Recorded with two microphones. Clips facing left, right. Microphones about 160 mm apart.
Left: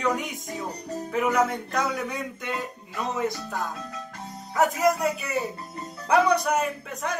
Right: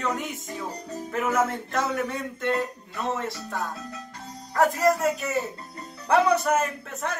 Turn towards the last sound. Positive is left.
turn(degrees=0)  # may be behind; listen again after turning